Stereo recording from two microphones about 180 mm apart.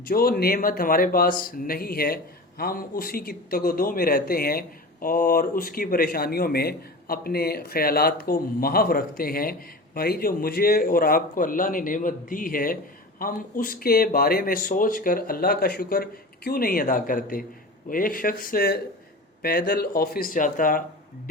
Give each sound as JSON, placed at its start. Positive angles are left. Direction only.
{"t": 0.0, "sound": "speech", "side_deg": 55}